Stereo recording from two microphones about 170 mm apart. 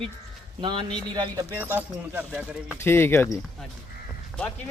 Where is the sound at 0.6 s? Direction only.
25° right (ahead or behind).